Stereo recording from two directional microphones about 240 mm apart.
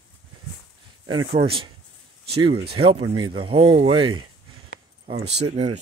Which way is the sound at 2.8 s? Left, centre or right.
Right.